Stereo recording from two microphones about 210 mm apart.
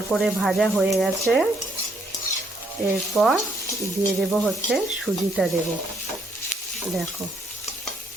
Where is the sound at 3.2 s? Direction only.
Centre (ahead or behind).